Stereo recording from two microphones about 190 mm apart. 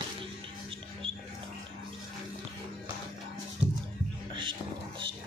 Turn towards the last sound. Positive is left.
turn(degrees=-5)  # may be behind; listen again after turning